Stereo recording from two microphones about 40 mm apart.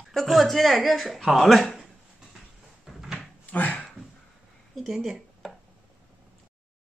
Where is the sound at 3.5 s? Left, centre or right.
Left.